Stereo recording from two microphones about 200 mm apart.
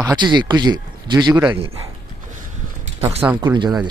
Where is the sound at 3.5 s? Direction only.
20° right (ahead or behind).